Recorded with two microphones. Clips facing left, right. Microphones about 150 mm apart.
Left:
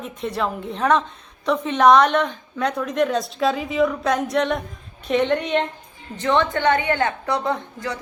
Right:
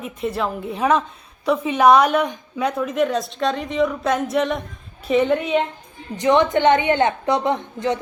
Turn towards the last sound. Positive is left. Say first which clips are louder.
# right 4 dB
turn(degrees=-20)  # may be behind; listen again after turning